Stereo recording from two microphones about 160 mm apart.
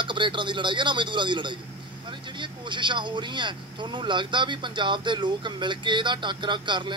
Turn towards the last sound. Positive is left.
turn(degrees=-30)  # may be behind; listen again after turning